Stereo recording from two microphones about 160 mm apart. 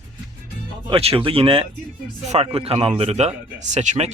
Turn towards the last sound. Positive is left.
turn(degrees=-45)  # may be behind; listen again after turning